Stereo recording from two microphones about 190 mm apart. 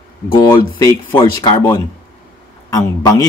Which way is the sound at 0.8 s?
20° left (ahead or behind).